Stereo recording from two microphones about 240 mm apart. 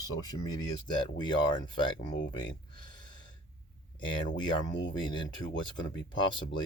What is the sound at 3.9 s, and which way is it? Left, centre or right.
Speech, centre.